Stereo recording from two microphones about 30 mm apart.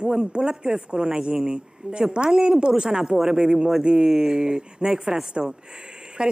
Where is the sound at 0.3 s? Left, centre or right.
Right.